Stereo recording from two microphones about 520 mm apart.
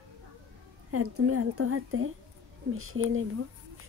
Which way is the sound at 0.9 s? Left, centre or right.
Right.